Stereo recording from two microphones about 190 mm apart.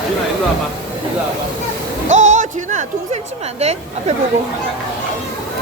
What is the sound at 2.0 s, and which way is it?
Music, 40° right (ahead or behind).